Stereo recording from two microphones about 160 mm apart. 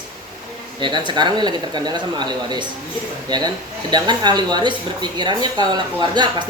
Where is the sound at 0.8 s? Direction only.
30° right (ahead or behind).